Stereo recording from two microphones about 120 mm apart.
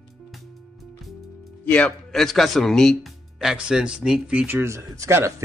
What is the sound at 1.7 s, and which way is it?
Speech, 10° left (ahead or behind).